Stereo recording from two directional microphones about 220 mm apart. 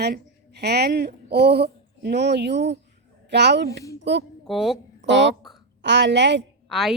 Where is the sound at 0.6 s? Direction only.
50° right (ahead or behind).